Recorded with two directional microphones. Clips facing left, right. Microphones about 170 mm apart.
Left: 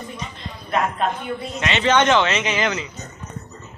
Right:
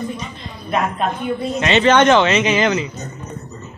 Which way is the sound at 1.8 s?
50° right (ahead or behind).